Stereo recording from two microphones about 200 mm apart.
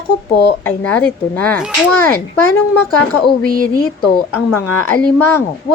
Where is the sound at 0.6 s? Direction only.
5° left (ahead or behind).